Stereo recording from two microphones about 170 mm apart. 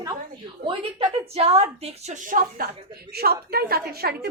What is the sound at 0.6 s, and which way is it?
A woman's voice, 35° right (ahead or behind).